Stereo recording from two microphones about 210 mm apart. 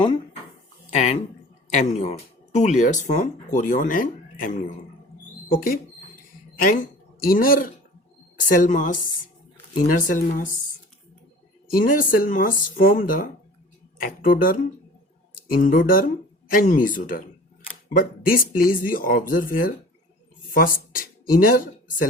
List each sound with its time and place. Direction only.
0.9 s speech: 30° left (ahead or behind)
11.7 s speech: 40° left (ahead or behind)